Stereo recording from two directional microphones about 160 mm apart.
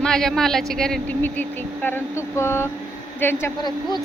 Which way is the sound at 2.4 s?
15° left (ahead or behind).